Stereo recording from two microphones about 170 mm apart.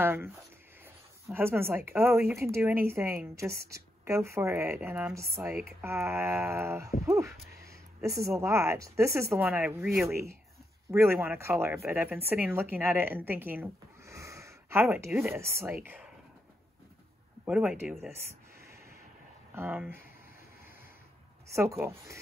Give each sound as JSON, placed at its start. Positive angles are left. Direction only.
{"t": 0.0, "sound": "speech", "side_deg": -15}
{"t": 1.3, "sound": "speech", "side_deg": -15}
{"t": 7.1, "sound": "a sound", "side_deg": -15}
{"t": 8.2, "sound": "speech", "side_deg": -15}
{"t": 17.5, "sound": "speech", "side_deg": -5}
{"t": 19.5, "sound": "speech", "side_deg": -10}
{"t": 21.5, "sound": "speech", "side_deg": -15}